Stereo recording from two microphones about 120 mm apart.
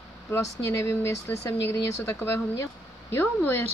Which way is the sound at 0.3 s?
25° left (ahead or behind).